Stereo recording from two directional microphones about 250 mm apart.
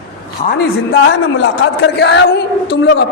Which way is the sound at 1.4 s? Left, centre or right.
Left.